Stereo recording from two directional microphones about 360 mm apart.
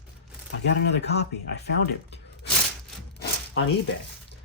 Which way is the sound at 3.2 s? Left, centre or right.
Left.